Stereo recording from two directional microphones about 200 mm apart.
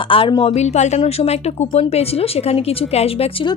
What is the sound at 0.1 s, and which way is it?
A woman's voice, 25° left (ahead or behind).